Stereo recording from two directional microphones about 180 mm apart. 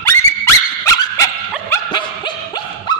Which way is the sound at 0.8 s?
20° left (ahead or behind).